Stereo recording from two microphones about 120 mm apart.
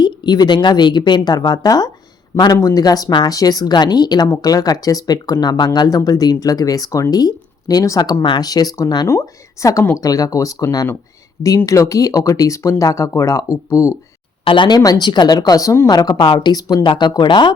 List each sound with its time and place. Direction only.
0.0 s speech: 35° left (ahead or behind)
14.4 s speech: 40° left (ahead or behind)